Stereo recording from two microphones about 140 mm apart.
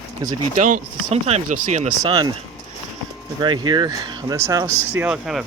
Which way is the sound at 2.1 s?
35° right (ahead or behind).